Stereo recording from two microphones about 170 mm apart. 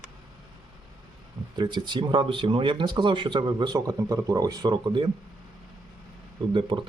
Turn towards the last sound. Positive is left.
turn(degrees=-30)  # may be behind; listen again after turning